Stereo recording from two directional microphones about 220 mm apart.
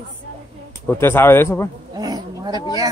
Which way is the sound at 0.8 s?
10° left (ahead or behind).